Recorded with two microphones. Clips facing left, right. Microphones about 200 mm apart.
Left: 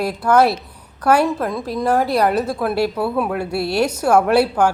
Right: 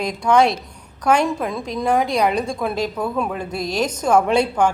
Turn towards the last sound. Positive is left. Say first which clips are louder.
# left 2 dB
turn(degrees=5)  # may be behind; listen again after turning